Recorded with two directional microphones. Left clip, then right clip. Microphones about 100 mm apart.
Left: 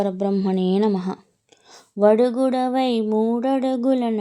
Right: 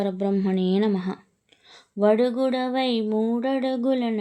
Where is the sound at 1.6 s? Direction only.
55° left (ahead or behind).